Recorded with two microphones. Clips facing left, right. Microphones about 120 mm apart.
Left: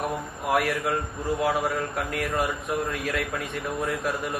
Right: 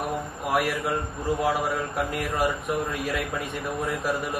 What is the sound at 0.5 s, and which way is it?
Speech, centre (ahead or behind).